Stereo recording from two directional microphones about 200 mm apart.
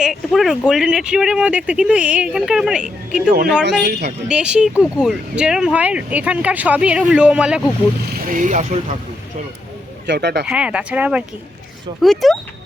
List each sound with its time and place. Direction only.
0.0 s speech: centre (ahead or behind)
3.2 s speech: 45° right (ahead or behind)
3.6 s speech: 60° right (ahead or behind)
4.3 s speech: 5° right (ahead or behind)
8.3 s speech: 40° right (ahead or behind)
10.1 s speech: 55° right (ahead or behind)
10.4 s speech: 5° right (ahead or behind)